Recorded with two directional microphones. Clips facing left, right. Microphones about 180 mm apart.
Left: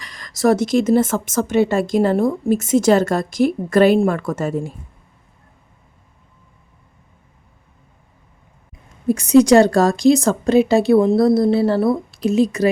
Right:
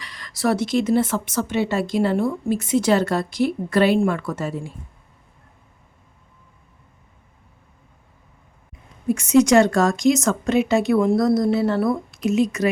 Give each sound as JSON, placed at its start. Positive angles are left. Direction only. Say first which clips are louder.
{"t": 0.0, "sound": "a woman's voice", "louder": "left 6 dB", "side_deg": 45}
{"t": 9.0, "sound": "speech", "louder": "left 4 dB", "side_deg": 35}